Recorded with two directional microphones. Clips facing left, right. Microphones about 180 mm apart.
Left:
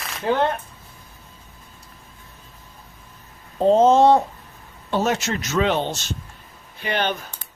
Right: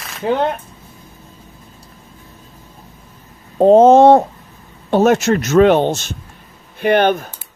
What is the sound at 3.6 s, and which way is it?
Speech, 55° right (ahead or behind).